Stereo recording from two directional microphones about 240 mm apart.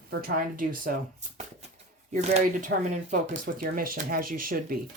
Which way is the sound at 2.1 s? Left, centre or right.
Right.